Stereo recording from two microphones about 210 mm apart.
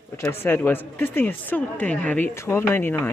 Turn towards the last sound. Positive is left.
turn(degrees=10)  # may be behind; listen again after turning